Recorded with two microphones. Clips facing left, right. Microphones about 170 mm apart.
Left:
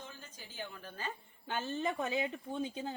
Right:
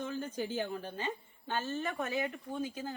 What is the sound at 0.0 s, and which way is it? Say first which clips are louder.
Speech: right 15 dB; 60° right (ahead or behind).